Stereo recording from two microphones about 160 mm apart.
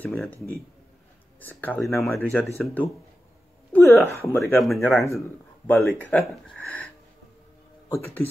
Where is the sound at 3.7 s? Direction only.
15° left (ahead or behind).